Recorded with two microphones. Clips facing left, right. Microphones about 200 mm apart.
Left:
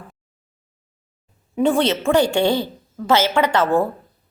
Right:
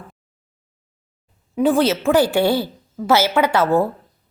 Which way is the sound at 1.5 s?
Centre (ahead or behind).